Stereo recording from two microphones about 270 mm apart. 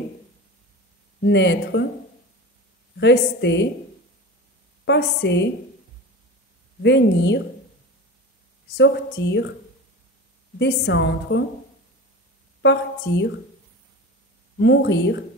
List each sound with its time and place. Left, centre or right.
1.2 s a woman's voice: left
3.0 s a woman's voice: left
4.8 s a woman's voice: left
6.8 s a woman's voice: left
8.7 s a woman's voice: left
10.6 s a woman's voice: left
12.6 s a woman's voice: left
14.6 s a woman's voice: left